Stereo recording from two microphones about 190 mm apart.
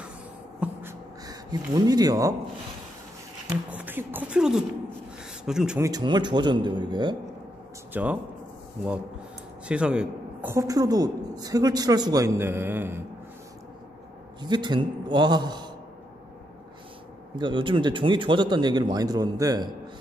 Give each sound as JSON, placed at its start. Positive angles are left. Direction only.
{"t": 0.6, "sound": "a sound", "side_deg": -15}
{"t": 3.7, "sound": "speech", "side_deg": -10}
{"t": 5.8, "sound": "speech", "side_deg": -20}
{"t": 7.9, "sound": "speech", "side_deg": -10}
{"t": 9.7, "sound": "a woman's voice", "side_deg": -5}
{"t": 14.4, "sound": "speech", "side_deg": -25}
{"t": 17.4, "sound": "speech", "side_deg": -25}